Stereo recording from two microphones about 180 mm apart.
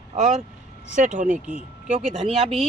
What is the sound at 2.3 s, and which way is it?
Speech, 35° right (ahead or behind).